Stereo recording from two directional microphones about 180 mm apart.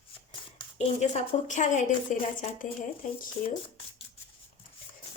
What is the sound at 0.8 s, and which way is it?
A woman's voice, 40° left (ahead or behind).